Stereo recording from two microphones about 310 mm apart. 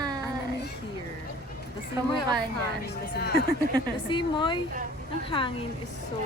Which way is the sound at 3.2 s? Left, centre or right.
Left.